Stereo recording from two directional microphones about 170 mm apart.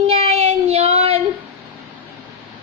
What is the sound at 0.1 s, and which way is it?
Child singing, 35° right (ahead or behind).